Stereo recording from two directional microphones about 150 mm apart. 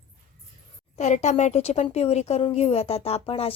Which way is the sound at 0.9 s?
50° left (ahead or behind).